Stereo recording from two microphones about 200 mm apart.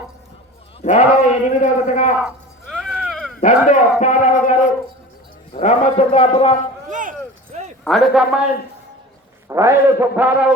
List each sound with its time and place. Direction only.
0.8 s a man's voice: 35° left (ahead or behind)
2.2 s music: centre (ahead or behind)
3.4 s a man's voice: 40° left (ahead or behind)
6.9 s a sound: 40° right (ahead or behind)
7.9 s a man's voice: centre (ahead or behind)
9.5 s a man's voice: 15° right (ahead or behind)